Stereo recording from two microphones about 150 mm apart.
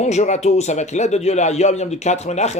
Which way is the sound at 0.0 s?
50° left (ahead or behind).